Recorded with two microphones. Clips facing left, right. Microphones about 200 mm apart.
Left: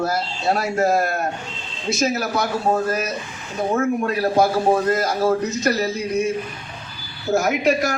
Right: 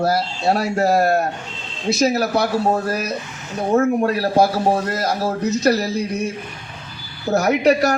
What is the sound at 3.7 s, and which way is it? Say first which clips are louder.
Speech: right 5 dB; 35° right (ahead or behind).